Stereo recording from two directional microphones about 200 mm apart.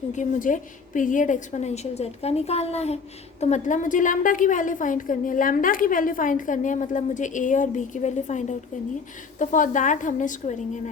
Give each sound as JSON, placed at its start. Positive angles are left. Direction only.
{"t": 0.1, "sound": "a woman's voice", "side_deg": 40}